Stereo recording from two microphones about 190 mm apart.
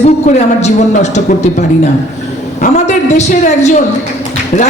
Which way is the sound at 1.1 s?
40° left (ahead or behind).